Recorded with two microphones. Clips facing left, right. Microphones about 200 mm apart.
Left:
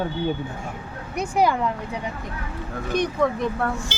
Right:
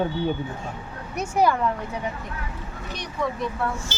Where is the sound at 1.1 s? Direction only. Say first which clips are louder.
Left 1 dB; 15° left (ahead or behind).